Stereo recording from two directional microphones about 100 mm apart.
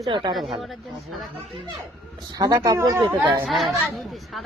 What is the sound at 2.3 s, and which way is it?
Speech, 40° right (ahead or behind).